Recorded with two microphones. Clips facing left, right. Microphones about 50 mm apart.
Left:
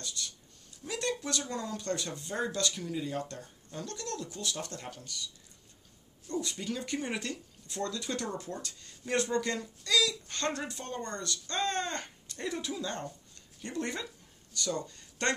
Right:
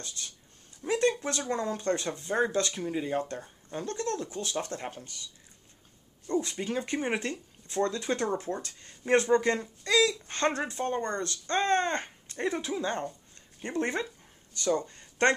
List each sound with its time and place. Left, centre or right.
0.0 s speech: right
6.4 s speech: right
14.5 s a sound: right